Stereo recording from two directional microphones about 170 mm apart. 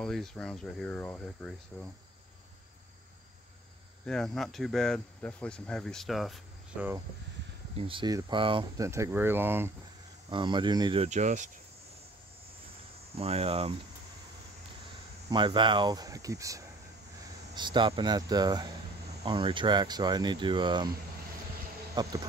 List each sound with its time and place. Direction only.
0.0 s speech: 5° left (ahead or behind)
4.0 s speech: 5° left (ahead or behind)
7.7 s speech: 30° right (ahead or behind)
8.8 s speech: 15° right (ahead or behind)
10.3 s speech: 25° right (ahead or behind)
11.1 s speech: 45° right (ahead or behind)
13.2 s speech: 35° right (ahead or behind)
15.2 s speech: 30° right (ahead or behind)
22.0 s speech: 25° right (ahead or behind)